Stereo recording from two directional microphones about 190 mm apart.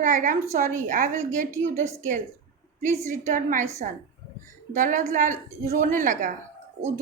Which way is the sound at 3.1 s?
45° right (ahead or behind).